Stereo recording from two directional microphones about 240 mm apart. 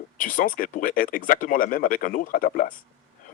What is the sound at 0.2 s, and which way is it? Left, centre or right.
Speech, left.